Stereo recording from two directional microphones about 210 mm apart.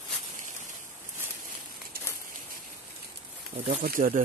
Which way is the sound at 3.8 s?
40° right (ahead or behind).